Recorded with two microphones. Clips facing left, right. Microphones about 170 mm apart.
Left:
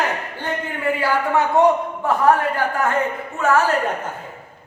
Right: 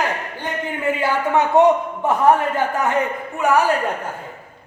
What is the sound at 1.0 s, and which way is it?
Speech, 20° right (ahead or behind).